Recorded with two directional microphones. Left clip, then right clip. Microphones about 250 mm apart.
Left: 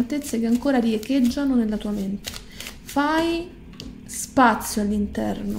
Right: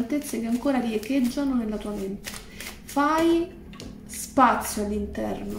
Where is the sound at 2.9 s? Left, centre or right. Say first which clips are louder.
Left 1 dB; left.